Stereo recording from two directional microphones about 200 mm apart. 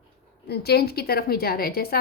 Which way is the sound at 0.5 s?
55° left (ahead or behind).